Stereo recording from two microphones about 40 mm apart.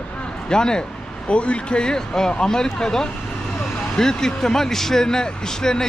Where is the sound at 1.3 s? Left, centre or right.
Left.